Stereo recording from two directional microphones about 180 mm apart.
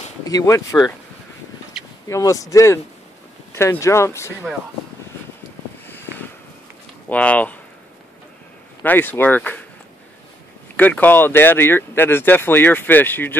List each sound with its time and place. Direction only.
0.2 s speech: 20° left (ahead or behind)
2.0 s speech: 20° left (ahead or behind)
7.1 s speech: 10° left (ahead or behind)
8.8 s speech: 10° left (ahead or behind)
10.8 s speech: 10° left (ahead or behind)